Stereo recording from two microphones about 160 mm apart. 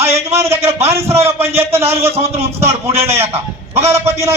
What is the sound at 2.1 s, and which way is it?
Speech, 40° right (ahead or behind).